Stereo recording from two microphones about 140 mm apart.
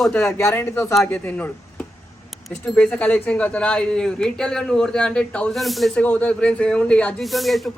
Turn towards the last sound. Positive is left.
turn(degrees=0)  # may be behind; listen again after turning